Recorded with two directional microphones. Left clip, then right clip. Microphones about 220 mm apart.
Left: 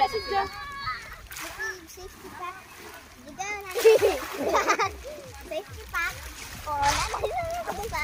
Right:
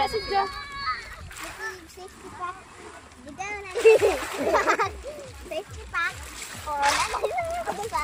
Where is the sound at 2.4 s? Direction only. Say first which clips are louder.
Right 4 dB; 15° left (ahead or behind).